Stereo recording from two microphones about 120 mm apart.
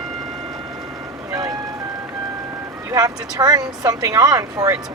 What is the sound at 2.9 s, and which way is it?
Speech, 30° right (ahead or behind).